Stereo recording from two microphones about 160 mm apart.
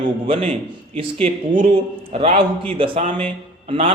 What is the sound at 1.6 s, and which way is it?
Speech, 40° right (ahead or behind).